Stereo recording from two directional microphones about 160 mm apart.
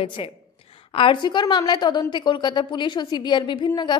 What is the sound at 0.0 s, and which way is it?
A woman's voice, 30° left (ahead or behind).